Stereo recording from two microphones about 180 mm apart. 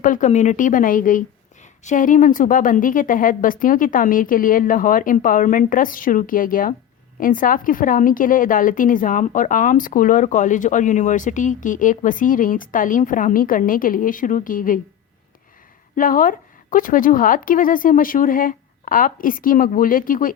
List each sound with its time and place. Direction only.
0.0 s a woman's voice: 45° left (ahead or behind)
16.0 s a woman's voice: 50° left (ahead or behind)